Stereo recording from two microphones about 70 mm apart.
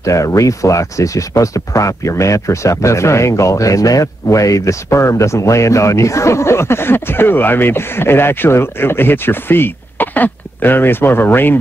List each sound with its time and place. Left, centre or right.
0.0 s speech: left